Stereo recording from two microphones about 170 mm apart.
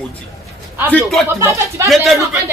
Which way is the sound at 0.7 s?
10° right (ahead or behind).